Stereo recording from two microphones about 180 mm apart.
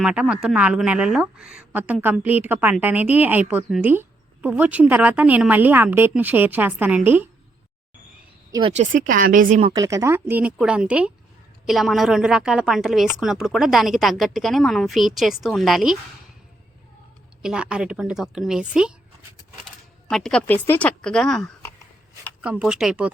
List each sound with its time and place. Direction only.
0.0 s a woman's voice: 5° right (ahead or behind)
8.7 s speech: 45° right (ahead or behind)
9.7 s a woman's voice: 20° right (ahead or behind); by 16.0 s centre (ahead or behind)
17.4 s a woman's voice: 5° right (ahead or behind)
20.1 s a woman's voice: 5° left (ahead or behind)